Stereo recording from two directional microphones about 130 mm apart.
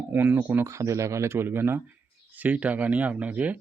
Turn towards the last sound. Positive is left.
turn(degrees=-10)  # may be behind; listen again after turning